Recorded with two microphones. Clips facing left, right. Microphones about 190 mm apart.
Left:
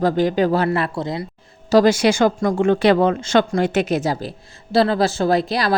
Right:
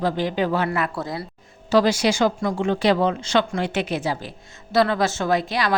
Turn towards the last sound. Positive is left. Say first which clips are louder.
# left 4 dB
turn(degrees=35)  # may be behind; listen again after turning